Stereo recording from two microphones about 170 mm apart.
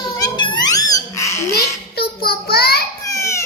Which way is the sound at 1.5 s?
65° left (ahead or behind).